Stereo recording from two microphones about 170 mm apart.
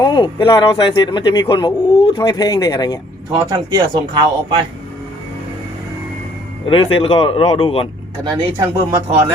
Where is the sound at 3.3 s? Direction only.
25° right (ahead or behind).